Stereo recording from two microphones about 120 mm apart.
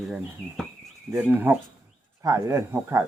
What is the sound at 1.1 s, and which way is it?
Speech, 15° right (ahead or behind).